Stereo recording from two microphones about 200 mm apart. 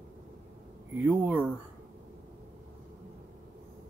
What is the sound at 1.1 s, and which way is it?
Speech, 5° right (ahead or behind).